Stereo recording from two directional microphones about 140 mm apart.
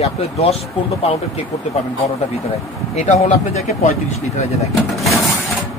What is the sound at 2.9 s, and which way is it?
Speech, 55° left (ahead or behind).